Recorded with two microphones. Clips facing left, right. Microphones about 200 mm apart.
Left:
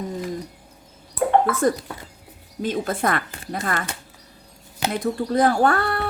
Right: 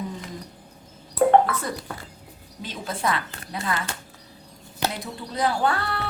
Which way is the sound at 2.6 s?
50° left (ahead or behind).